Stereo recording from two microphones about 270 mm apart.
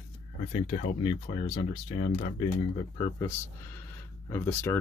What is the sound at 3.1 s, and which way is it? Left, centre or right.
Speech, centre.